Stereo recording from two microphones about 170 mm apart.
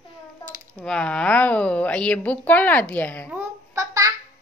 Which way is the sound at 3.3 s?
20° right (ahead or behind).